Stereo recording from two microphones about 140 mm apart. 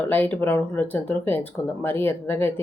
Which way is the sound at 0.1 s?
15° left (ahead or behind).